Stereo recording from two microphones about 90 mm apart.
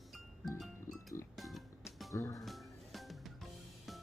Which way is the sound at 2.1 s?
35° left (ahead or behind).